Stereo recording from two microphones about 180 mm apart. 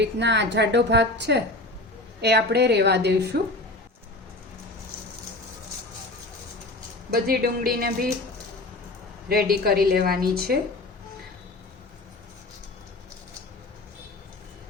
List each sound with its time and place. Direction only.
0.0 s a woman's voice: 75° right (ahead or behind)
7.1 s a woman's voice: 55° right (ahead or behind)
9.3 s a woman's voice: 60° right (ahead or behind)